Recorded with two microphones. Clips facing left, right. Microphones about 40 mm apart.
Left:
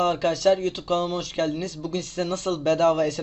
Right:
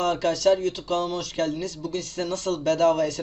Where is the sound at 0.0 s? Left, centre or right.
Left.